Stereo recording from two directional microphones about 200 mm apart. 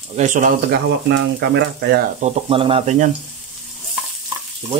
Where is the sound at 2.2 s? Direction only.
30° right (ahead or behind).